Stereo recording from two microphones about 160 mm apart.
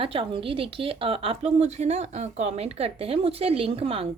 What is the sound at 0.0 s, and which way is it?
Speech, 35° right (ahead or behind).